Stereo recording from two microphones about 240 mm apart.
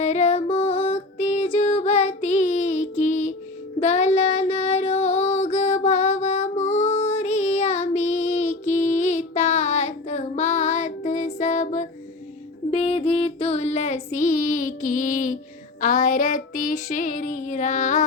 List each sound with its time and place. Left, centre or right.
0.0 s music: left
3.8 s child singing: left
15.8 s female singing: left